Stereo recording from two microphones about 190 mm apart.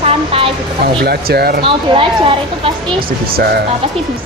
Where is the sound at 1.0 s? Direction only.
55° right (ahead or behind).